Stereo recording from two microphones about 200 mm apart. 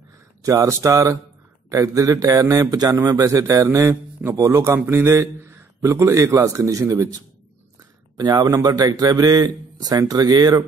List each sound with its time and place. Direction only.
0.4 s speech: 15° right (ahead or behind)
8.2 s a man's voice: 20° right (ahead or behind)